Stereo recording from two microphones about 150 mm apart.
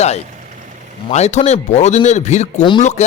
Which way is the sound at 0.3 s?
55° right (ahead or behind).